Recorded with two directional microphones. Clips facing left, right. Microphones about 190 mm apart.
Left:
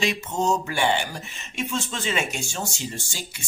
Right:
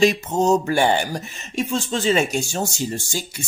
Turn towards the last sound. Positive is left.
turn(degrees=-40)  # may be behind; listen again after turning